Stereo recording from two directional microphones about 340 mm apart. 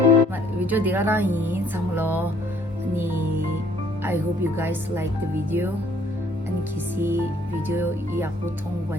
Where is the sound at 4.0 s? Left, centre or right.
Centre.